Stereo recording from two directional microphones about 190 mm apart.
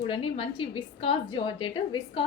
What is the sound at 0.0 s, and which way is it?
A woman's voice, 30° left (ahead or behind).